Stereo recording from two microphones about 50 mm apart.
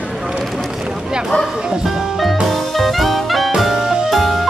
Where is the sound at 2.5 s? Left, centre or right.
Centre.